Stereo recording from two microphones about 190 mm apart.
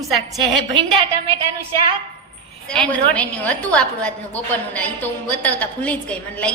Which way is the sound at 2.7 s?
5° left (ahead or behind).